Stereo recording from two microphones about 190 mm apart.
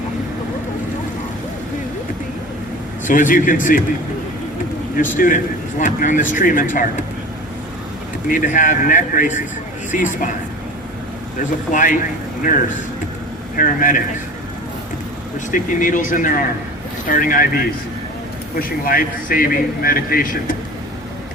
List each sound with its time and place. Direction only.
3.1 s a man's voice: 45° left (ahead or behind)
5.1 s a man's voice: 45° left (ahead or behind)
8.3 s a man's voice: 45° left (ahead or behind)
11.3 s a man's voice: 45° left (ahead or behind)
13.6 s a man's voice: 45° left (ahead or behind)
15.5 s a man's voice: 45° left (ahead or behind)
18.9 s a man's voice: 50° left (ahead or behind)